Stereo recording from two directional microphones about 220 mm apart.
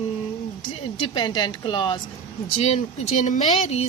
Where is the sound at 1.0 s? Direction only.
20° left (ahead or behind).